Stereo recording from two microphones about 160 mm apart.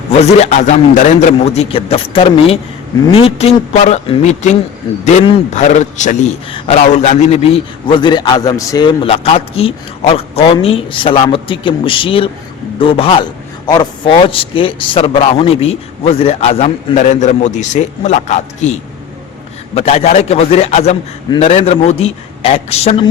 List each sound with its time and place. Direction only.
0.1 s a man's voice: 40° left (ahead or behind)